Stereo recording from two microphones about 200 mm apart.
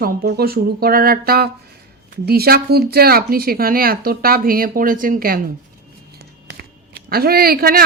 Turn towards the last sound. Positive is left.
turn(degrees=-50)  # may be behind; listen again after turning